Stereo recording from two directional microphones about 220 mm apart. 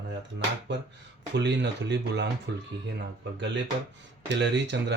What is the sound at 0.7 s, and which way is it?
Speech, 55° right (ahead or behind).